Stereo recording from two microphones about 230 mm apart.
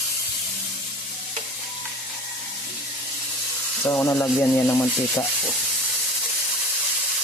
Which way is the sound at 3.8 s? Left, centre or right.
Centre.